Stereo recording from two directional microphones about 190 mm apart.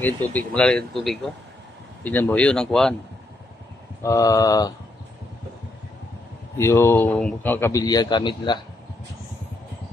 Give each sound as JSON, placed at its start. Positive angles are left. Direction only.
{"t": 0.3, "sound": "speech", "side_deg": 5}
{"t": 4.0, "sound": "mantra", "side_deg": 20}
{"t": 6.6, "sound": "a man's voice", "side_deg": 15}